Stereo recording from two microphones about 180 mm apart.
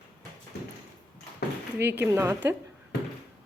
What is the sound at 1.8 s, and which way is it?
Speech, 70° right (ahead or behind).